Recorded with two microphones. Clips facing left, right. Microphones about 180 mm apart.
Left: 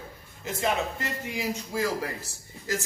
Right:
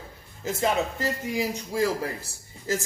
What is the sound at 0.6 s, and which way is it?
A man's voice, 35° right (ahead or behind).